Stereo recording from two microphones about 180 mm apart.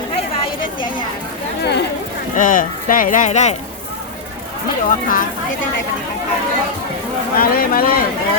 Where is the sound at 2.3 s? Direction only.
45° left (ahead or behind).